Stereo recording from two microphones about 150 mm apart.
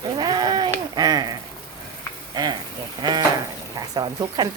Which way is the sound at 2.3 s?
30° right (ahead or behind).